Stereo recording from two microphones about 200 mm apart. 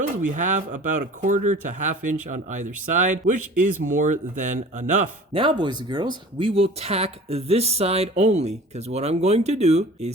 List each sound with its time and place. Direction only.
0.3 s speech: 40° right (ahead or behind)
5.4 s speech: 25° right (ahead or behind)